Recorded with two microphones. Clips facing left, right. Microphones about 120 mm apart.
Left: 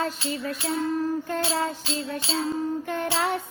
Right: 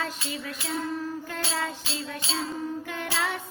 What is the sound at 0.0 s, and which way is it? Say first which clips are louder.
Music: left 5 dB; 40° left (ahead or behind).